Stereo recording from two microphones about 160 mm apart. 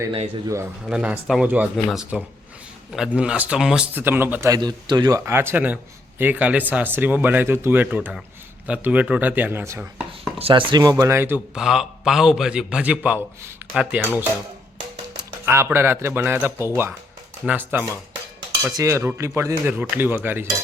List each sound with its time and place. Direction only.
0.4 s a man's voice: 20° right (ahead or behind)
0.9 s speech: 5° right (ahead or behind)
10.1 s chopping: 35° right (ahead or behind); by 11.3 s 15° right (ahead or behind)
11.5 s a man's voice: 5° right (ahead or behind)
15.4 s speech: 15° right (ahead or behind)